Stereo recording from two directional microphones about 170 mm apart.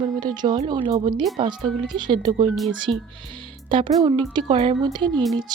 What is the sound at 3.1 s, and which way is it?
Speech, 30° right (ahead or behind).